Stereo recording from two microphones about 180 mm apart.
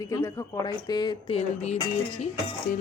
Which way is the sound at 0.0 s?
15° left (ahead or behind).